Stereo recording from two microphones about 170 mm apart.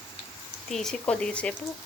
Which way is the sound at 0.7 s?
5° left (ahead or behind).